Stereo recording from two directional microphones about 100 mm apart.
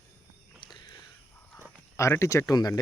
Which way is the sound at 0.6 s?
45° left (ahead or behind).